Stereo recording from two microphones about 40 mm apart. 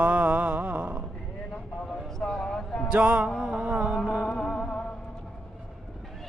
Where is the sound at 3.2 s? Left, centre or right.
Centre.